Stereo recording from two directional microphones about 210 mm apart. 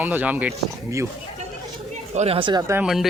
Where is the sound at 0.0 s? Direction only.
10° right (ahead or behind).